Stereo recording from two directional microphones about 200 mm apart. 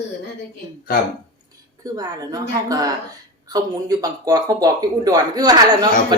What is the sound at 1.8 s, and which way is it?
Speech, 20° right (ahead or behind).